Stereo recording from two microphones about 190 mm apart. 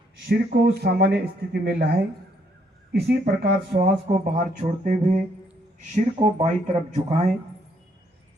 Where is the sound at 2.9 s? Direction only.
60° right (ahead or behind).